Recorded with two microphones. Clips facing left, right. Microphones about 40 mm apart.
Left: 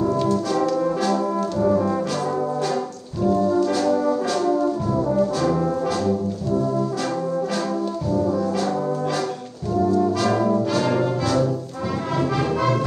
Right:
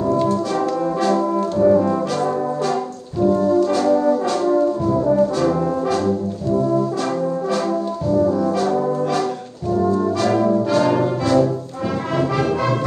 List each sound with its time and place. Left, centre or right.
0.1 s brass instrument: right
1.6 s brass instrument: centre
3.3 s brass instrument: right
3.9 s brass instrument: centre
4.3 s brass instrument: right
4.9 s brass instrument: centre
8.5 s brass instrument: right
9.8 s brass instrument: right
10.9 s music: right
12.2 s brass instrument: right